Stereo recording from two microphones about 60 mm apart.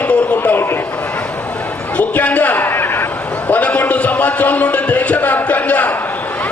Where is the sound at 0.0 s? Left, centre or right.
Left.